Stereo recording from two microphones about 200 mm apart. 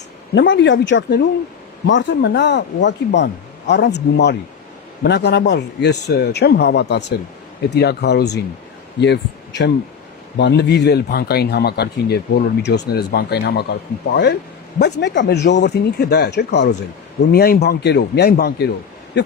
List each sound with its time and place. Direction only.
0.3 s speech: 65° left (ahead or behind)